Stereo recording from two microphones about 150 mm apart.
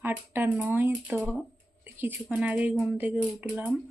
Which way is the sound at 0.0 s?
10° right (ahead or behind).